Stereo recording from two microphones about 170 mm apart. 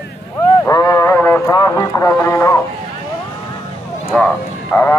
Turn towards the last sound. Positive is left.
turn(degrees=10)  # may be behind; listen again after turning